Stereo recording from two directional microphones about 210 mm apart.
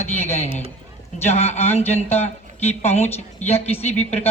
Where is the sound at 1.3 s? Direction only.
30° left (ahead or behind).